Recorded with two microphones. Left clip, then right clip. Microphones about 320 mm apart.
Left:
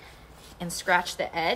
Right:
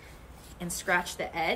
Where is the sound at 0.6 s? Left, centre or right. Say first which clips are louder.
Left 4 dB; left.